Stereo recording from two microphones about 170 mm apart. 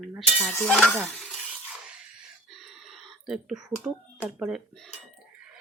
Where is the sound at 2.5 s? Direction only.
Centre (ahead or behind).